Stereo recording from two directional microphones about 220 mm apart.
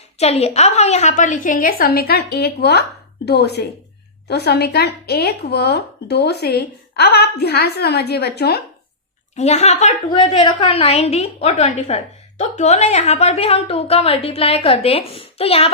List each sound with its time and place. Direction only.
0.2 s a woman's voice: 30° left (ahead or behind); by 8.6 s 50° left (ahead or behind)
9.3 s a woman's voice: 30° left (ahead or behind)